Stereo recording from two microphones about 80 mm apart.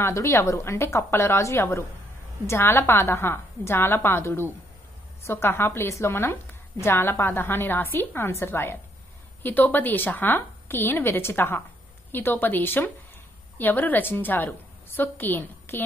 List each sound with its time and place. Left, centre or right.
0.0 s a woman's voice: left